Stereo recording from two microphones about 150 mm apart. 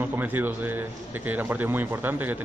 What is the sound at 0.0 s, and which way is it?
A man's voice, 10° right (ahead or behind).